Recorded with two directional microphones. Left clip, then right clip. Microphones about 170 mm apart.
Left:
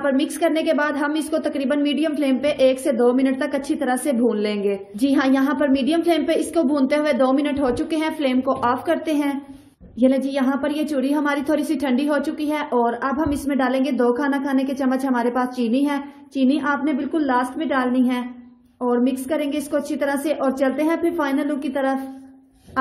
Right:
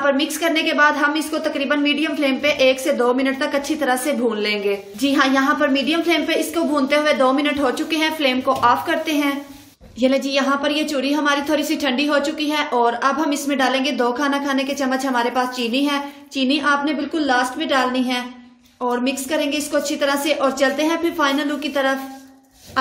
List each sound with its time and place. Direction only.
0.0 s a woman's voice: 40° left (ahead or behind)